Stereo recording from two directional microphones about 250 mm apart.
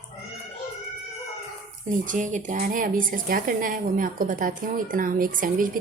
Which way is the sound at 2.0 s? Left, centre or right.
Right.